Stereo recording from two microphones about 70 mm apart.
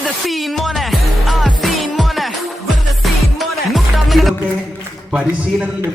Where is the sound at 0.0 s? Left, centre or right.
Centre.